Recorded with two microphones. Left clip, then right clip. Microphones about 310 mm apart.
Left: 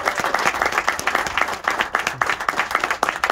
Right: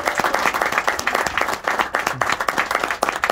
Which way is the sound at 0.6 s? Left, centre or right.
Right.